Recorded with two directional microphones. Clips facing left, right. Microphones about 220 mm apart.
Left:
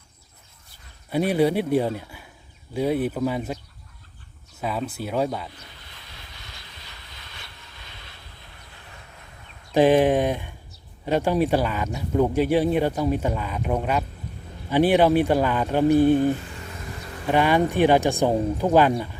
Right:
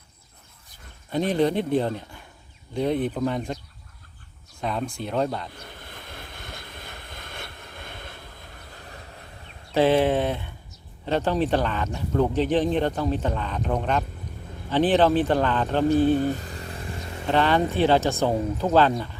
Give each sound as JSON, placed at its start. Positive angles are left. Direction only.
{"t": 1.1, "sound": "speech", "side_deg": 10}
{"t": 4.6, "sound": "speech", "side_deg": 5}
{"t": 5.5, "sound": "vehicle", "side_deg": -50}
{"t": 9.7, "sound": "speech", "side_deg": 15}
{"t": 16.3, "sound": "a sound", "side_deg": -35}
{"t": 17.2, "sound": "speech", "side_deg": 10}